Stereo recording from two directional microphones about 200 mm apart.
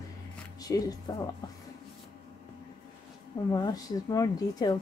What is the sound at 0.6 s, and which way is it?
Speech, 20° left (ahead or behind).